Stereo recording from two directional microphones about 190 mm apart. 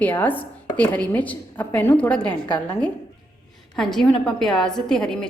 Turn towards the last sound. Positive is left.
turn(degrees=5)  # may be behind; listen again after turning